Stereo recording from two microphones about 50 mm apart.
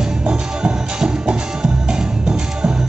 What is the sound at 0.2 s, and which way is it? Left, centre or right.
Music, right.